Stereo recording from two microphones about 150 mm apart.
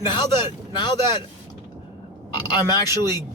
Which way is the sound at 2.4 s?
25° left (ahead or behind).